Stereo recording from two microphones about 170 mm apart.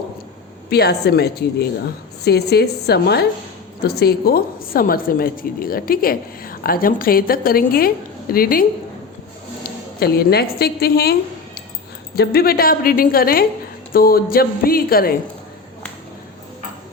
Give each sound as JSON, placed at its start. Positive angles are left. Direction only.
{"t": 0.7, "sound": "a woman's voice", "side_deg": 70}
{"t": 10.0, "sound": "a woman's voice", "side_deg": 65}